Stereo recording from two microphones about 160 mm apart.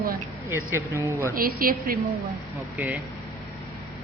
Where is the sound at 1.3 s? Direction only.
65° right (ahead or behind).